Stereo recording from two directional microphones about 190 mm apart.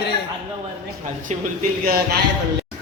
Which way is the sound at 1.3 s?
40° right (ahead or behind).